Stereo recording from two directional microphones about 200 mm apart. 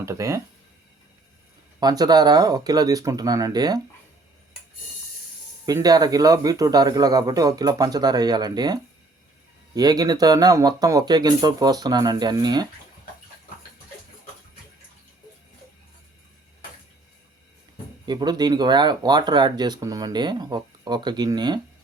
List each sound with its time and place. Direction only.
0.0 s speech: 15° right (ahead or behind)
1.8 s speech: 20° right (ahead or behind)
5.6 s speech: 20° right (ahead or behind)
18.0 s speech: 20° right (ahead or behind)